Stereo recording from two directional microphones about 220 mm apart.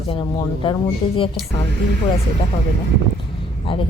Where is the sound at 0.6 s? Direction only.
25° left (ahead or behind).